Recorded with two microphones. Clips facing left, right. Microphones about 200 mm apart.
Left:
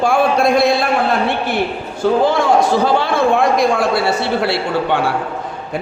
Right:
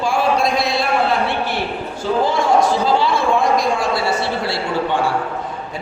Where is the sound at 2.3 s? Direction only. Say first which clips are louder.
Left 2 dB; 55° left (ahead or behind).